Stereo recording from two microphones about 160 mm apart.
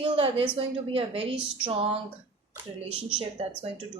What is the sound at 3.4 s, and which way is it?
Speech, 40° right (ahead or behind).